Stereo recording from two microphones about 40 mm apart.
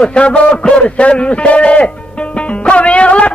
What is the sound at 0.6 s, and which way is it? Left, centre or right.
A man's voice, left.